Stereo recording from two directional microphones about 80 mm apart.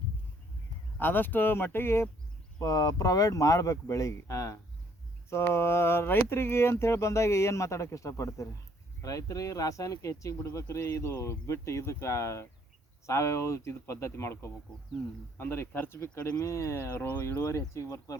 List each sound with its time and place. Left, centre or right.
0.9 s speech: left
2.6 s speech: left
16.3 s speech: left